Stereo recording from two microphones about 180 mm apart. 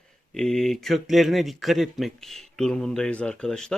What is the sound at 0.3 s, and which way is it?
Speech, centre (ahead or behind).